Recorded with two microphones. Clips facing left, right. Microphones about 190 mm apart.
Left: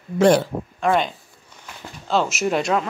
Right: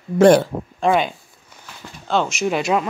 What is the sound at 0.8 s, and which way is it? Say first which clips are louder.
Speech: right 2 dB; 30° right (ahead or behind).